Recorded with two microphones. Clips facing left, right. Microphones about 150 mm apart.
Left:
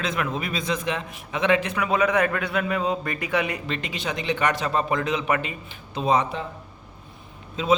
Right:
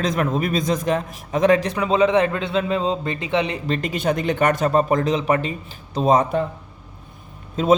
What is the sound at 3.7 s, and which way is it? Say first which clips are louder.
Speech: right 8 dB; 40° right (ahead or behind).